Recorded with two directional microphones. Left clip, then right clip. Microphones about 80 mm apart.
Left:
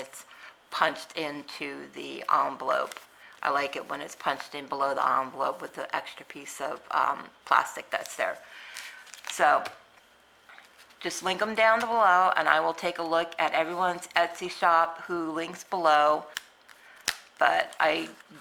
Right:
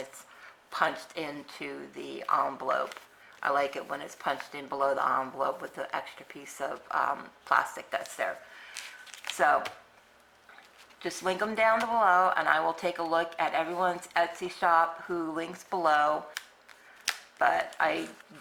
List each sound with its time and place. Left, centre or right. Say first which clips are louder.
0.0 s a woman's voice: left 1 dB; left
8.7 s a sound: right 1 dB; centre
9.3 s speech: left 2 dB; left
11.0 s a woman's voice: left 2 dB; left
17.3 s a woman's voice: left 3 dB; left